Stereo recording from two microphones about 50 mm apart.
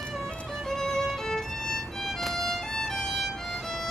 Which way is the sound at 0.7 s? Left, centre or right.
Centre.